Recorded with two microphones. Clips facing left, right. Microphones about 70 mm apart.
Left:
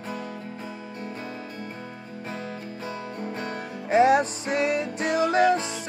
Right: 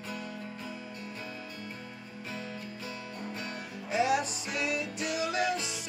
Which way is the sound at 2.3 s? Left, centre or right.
Left.